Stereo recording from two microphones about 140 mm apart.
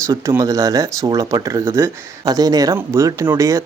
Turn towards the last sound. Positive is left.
turn(degrees=-20)  # may be behind; listen again after turning